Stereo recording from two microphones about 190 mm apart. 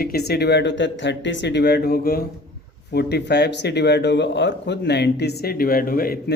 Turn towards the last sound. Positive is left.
turn(degrees=50)  # may be behind; listen again after turning